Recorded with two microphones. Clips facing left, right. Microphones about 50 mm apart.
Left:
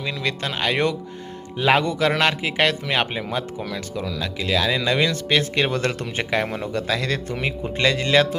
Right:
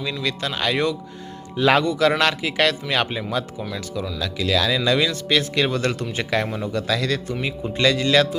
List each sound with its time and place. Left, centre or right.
0.0 s a man's voice: left
1.5 s a man's voice: centre
1.8 s a man's voice: left